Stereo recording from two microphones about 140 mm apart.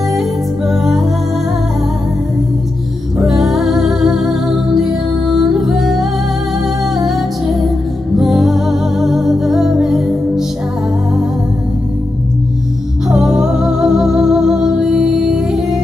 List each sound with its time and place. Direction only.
0.7 s music: centre (ahead or behind)
3.2 s music: centre (ahead or behind)
8.2 s music: centre (ahead or behind)
13.1 s music: 5° right (ahead or behind)